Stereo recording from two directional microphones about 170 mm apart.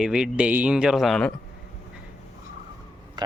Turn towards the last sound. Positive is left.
turn(degrees=-25)  # may be behind; listen again after turning